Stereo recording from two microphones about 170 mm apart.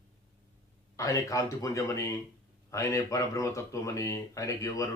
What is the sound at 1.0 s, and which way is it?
Speech, 20° left (ahead or behind).